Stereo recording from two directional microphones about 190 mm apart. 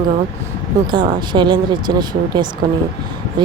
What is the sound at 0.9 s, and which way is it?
Speech, 25° right (ahead or behind).